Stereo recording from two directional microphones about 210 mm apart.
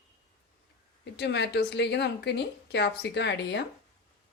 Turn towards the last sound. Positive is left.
turn(degrees=55)  # may be behind; listen again after turning